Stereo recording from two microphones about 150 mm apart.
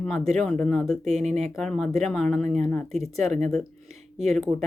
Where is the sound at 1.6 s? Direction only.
Centre (ahead or behind).